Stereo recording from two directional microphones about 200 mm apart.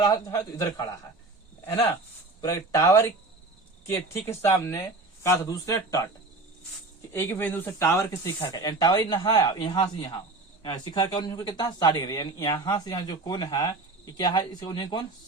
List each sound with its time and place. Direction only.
0.0 s speech: 20° left (ahead or behind)
2.4 s speech: 15° left (ahead or behind)
7.1 s speech: 10° left (ahead or behind)